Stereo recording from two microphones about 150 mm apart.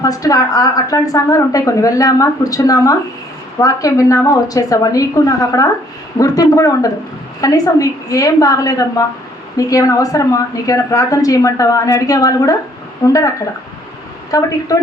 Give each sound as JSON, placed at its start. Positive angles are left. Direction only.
{"t": 0.0, "sound": "a woman's voice", "side_deg": 25}
{"t": 14.3, "sound": "a woman's voice", "side_deg": 25}